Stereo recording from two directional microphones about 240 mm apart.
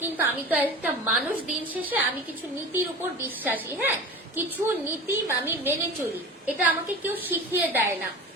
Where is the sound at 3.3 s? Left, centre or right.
Centre.